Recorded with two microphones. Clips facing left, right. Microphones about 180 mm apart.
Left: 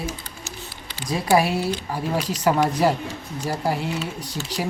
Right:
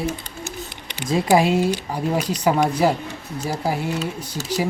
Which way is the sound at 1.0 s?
20° right (ahead or behind).